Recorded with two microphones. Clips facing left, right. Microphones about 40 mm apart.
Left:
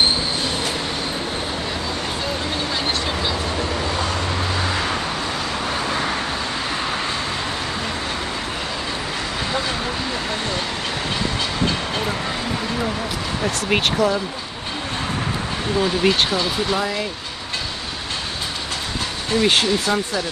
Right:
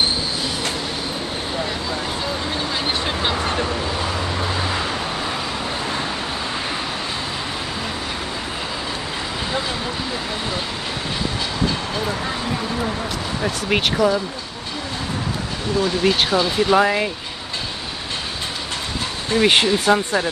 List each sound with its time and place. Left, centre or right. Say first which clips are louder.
13.4 s speech: even; centre
16.1 s speech: right 1 dB; centre
16.7 s speech: right 6 dB; right
19.4 s speech: right 3 dB; right
19.8 s speech: right 4 dB; right